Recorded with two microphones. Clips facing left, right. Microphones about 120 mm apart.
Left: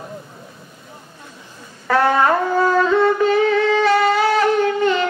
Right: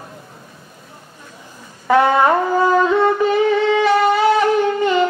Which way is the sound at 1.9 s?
15° right (ahead or behind).